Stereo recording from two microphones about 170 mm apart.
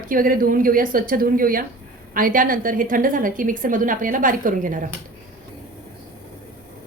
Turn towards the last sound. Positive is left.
turn(degrees=-50)  # may be behind; listen again after turning